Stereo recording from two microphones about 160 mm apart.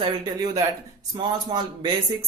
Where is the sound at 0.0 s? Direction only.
25° right (ahead or behind).